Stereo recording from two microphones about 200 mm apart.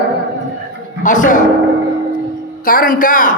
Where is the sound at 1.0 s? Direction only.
40° left (ahead or behind).